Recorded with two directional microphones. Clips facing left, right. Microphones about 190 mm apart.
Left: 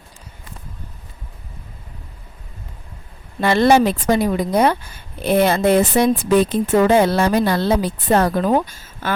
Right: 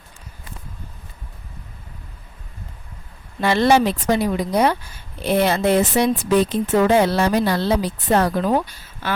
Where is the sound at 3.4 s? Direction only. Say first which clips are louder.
Left 2 dB; 50° left (ahead or behind).